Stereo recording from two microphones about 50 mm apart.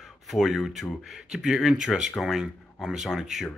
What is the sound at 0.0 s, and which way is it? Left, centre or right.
Speech, centre.